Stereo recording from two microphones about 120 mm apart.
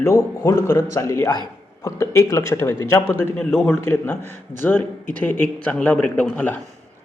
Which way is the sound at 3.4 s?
5° left (ahead or behind).